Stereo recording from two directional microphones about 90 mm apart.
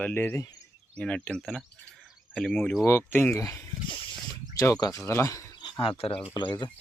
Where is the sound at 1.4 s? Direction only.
Centre (ahead or behind).